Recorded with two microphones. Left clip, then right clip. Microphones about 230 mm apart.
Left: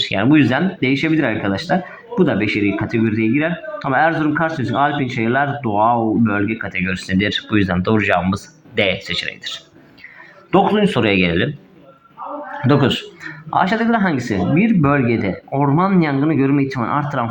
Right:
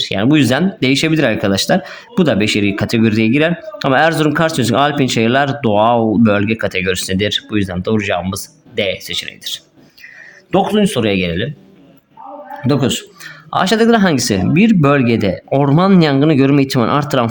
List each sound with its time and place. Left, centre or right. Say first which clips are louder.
0.0 s speech: right 1 dB; right
12.6 s speech: even; right
13.5 s speech: right 4 dB; right